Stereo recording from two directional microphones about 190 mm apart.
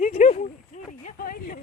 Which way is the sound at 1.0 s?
50° left (ahead or behind).